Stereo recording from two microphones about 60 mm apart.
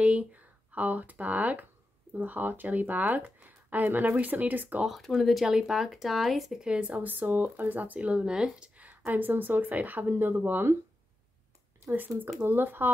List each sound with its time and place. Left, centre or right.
0.0 s speech: right
4.8 s speech: centre
6.8 s speech: right
9.1 s speech: right
11.8 s speech: right